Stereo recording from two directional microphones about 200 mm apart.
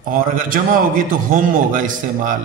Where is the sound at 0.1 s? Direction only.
45° right (ahead or behind).